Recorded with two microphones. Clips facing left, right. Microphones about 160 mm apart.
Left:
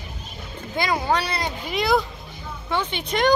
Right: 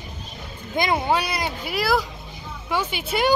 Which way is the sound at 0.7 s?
20° right (ahead or behind).